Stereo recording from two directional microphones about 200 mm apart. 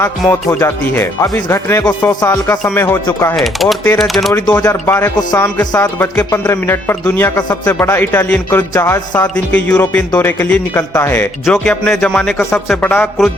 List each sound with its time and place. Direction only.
0.6 s speech: 15° left (ahead or behind)
3.3 s speech: centre (ahead or behind)
4.3 s speech: 10° left (ahead or behind)